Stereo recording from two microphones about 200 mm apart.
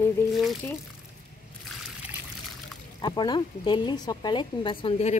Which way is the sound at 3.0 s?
20° left (ahead or behind).